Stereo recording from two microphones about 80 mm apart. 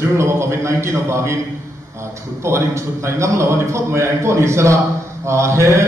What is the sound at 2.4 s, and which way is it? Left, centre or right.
A man's voice, right.